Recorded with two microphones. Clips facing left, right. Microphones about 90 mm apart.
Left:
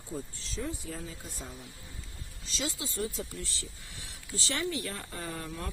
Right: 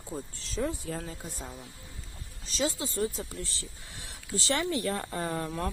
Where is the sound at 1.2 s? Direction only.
35° right (ahead or behind).